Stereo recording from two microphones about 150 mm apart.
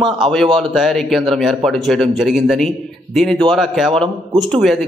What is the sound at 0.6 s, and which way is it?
Speech, centre (ahead or behind).